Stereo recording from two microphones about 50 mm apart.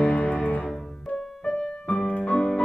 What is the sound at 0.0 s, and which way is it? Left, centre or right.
Music, left.